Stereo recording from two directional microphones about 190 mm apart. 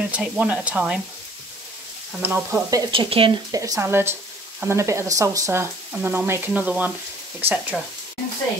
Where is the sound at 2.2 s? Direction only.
10° right (ahead or behind).